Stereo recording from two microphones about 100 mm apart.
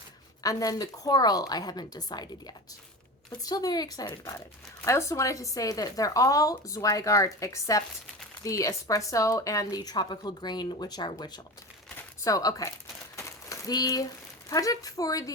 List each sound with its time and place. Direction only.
0.4 s speech: 35° left (ahead or behind)
13.1 s a sound: 30° left (ahead or behind)
14.5 s speech: 35° left (ahead or behind)